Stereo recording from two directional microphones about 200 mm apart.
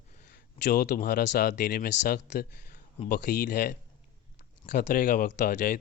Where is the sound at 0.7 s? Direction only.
45° left (ahead or behind).